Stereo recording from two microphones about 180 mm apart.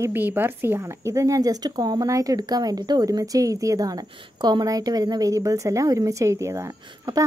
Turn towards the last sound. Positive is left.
turn(degrees=-20)  # may be behind; listen again after turning